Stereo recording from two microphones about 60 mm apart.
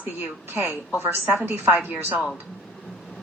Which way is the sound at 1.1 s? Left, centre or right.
Right.